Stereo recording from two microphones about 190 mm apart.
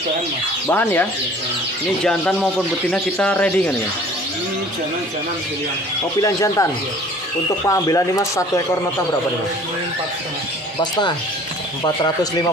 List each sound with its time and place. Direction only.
0.7 s speech: 10° left (ahead or behind)
2.0 s speech: 5° left (ahead or behind)
6.2 s speech: 15° left (ahead or behind)
10.8 s speech: 25° left (ahead or behind)